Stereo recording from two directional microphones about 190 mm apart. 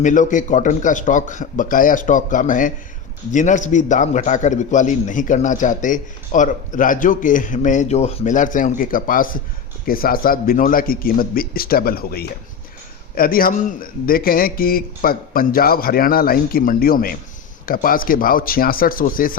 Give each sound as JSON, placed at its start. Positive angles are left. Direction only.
{"t": 0.0, "sound": "a man's voice", "side_deg": 40}